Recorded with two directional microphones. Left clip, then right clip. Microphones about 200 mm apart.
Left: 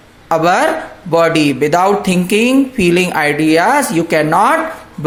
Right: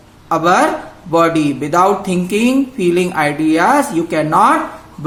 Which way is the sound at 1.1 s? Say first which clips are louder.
Left 2 dB; 35° left (ahead or behind).